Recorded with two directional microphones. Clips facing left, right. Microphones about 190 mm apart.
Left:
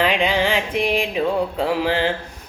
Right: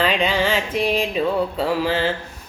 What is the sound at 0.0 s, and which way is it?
Music, 15° left (ahead or behind).